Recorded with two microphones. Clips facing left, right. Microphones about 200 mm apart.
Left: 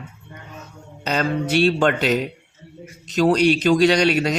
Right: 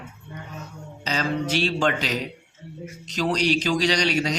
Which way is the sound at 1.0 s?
55° left (ahead or behind).